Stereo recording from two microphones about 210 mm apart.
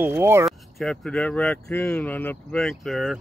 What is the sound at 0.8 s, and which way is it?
Speech, centre (ahead or behind).